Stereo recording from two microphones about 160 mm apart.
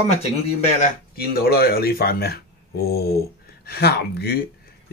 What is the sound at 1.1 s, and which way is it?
Speech, 75° left (ahead or behind).